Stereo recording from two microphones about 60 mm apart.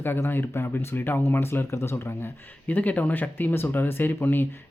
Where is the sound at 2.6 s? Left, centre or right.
Left.